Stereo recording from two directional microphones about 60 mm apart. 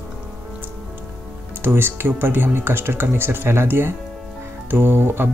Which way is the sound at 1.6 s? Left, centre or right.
Right.